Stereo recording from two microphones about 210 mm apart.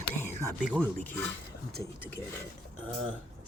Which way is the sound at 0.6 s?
5° right (ahead or behind).